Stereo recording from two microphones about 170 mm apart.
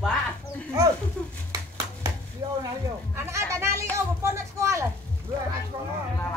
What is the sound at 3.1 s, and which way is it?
Speech, 15° right (ahead or behind).